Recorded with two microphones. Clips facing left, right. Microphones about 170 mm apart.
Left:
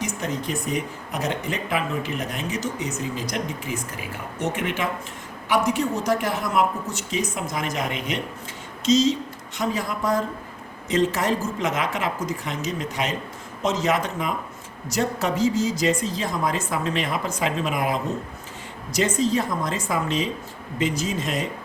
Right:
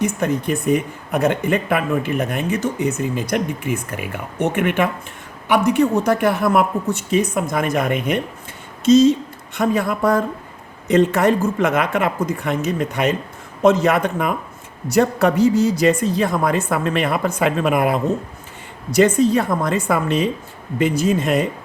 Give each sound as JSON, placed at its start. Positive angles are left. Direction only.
{"t": 0.0, "sound": "speech", "side_deg": -55}